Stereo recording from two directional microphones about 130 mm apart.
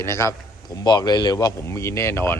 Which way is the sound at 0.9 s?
35° left (ahead or behind).